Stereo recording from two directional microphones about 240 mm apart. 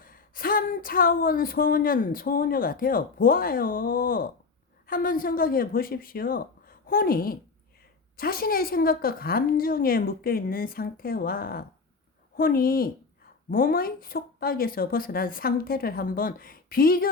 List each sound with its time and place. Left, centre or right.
0.0 s speech: left